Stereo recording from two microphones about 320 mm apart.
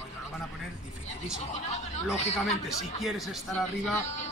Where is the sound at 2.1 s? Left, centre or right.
Left.